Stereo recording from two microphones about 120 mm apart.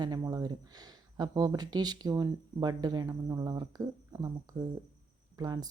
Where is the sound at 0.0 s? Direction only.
35° right (ahead or behind).